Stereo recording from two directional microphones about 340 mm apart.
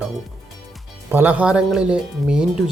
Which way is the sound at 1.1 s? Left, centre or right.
Centre.